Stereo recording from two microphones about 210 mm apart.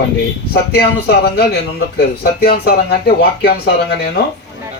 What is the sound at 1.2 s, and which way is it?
Speech, 50° left (ahead or behind).